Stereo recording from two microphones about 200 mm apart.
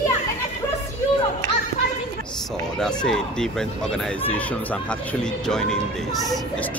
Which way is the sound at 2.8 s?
5° left (ahead or behind).